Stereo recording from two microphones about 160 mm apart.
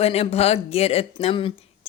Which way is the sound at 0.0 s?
40° left (ahead or behind).